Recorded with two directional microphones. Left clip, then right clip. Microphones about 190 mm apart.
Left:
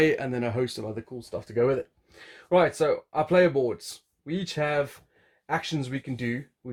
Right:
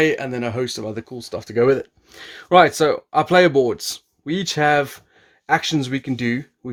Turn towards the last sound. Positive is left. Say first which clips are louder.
# right 9 dB
turn(degrees=-50)  # may be behind; listen again after turning